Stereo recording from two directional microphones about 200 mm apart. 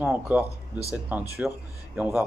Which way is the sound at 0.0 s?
5° right (ahead or behind).